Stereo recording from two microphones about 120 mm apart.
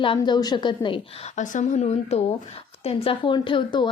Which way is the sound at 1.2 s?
90° left.